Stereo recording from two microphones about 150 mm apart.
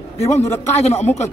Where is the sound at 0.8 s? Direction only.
45° left (ahead or behind).